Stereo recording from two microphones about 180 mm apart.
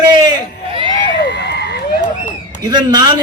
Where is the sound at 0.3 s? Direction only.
30° right (ahead or behind).